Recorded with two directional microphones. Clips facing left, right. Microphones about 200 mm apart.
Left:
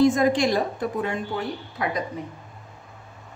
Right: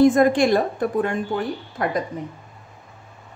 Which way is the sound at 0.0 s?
55° right (ahead or behind).